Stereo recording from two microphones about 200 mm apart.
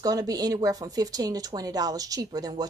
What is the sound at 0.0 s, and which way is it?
A woman's voice, 20° right (ahead or behind).